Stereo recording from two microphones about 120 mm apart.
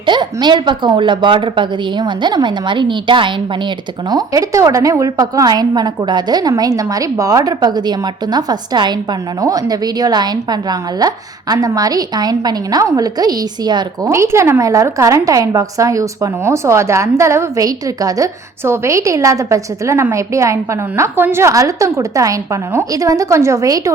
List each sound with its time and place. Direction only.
0.0 s a woman's voice: 40° right (ahead or behind)
14.1 s a woman's voice: 25° right (ahead or behind)